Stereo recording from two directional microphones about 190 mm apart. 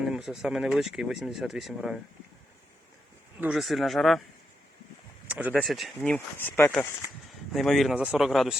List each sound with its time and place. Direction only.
0.0 s speech: centre (ahead or behind)
3.4 s speech: centre (ahead or behind)
5.3 s speech: 10° right (ahead or behind)